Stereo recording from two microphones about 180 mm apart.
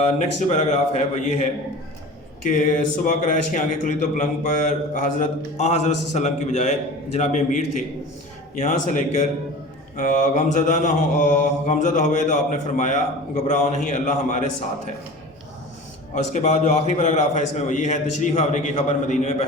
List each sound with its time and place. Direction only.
0.0 s a man's voice: 40° left (ahead or behind)
2.4 s mantra: 40° left (ahead or behind)
5.2 s a man's voice: 40° left (ahead or behind)
8.5 s mantra: 45° left (ahead or behind)
16.1 s a man's voice: 40° left (ahead or behind)